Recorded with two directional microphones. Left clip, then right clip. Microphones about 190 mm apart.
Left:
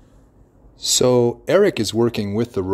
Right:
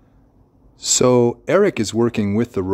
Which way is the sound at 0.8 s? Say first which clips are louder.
Right 1 dB; 20° right (ahead or behind).